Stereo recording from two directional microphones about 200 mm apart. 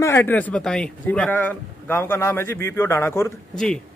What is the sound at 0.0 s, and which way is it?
A man's voice, 10° left (ahead or behind).